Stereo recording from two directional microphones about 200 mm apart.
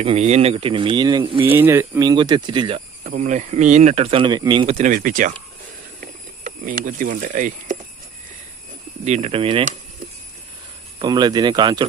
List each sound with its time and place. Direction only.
0.0 s speech: 30° right (ahead or behind)
1.5 s speech: 10° right (ahead or behind); by 4.9 s 30° right (ahead or behind)
4.9 s speech: 45° right (ahead or behind)
9.0 s speech: 30° right (ahead or behind)
11.0 s speech: 20° right (ahead or behind)